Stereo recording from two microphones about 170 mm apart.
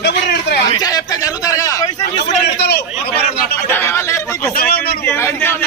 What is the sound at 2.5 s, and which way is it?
Speech, 75° left (ahead or behind).